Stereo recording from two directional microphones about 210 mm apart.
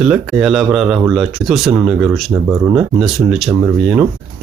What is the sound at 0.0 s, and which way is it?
Speech, centre (ahead or behind).